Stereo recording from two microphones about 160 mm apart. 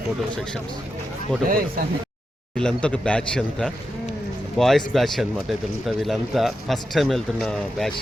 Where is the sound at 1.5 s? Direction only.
65° right (ahead or behind).